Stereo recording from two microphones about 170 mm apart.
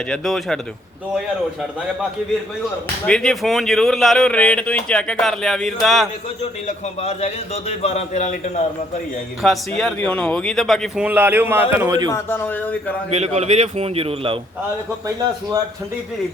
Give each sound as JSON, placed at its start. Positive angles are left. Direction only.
{"t": 0.1, "sound": "speech", "side_deg": 0}
{"t": 3.1, "sound": "speech", "side_deg": 5}
{"t": 6.4, "sound": "a man's voice", "side_deg": 40}
{"t": 9.4, "sound": "a man's voice", "side_deg": 0}
{"t": 12.1, "sound": "speech", "side_deg": 10}
{"t": 13.1, "sound": "a man's voice", "side_deg": -40}
{"t": 15.0, "sound": "a man's voice", "side_deg": -25}